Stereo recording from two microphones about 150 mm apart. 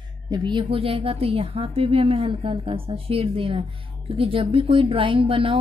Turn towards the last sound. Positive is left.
turn(degrees=-35)  # may be behind; listen again after turning